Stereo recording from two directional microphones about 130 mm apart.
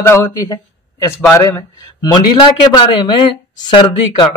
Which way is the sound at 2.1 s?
35° left (ahead or behind).